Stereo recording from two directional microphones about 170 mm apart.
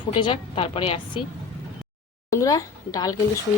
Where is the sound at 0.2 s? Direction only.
30° left (ahead or behind).